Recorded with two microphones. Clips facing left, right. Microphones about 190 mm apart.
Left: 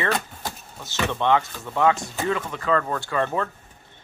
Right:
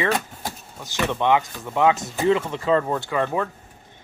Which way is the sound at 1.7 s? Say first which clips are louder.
Right 2 dB; 15° right (ahead or behind).